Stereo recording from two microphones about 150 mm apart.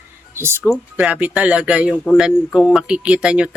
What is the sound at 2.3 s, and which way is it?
Speech, 5° left (ahead or behind).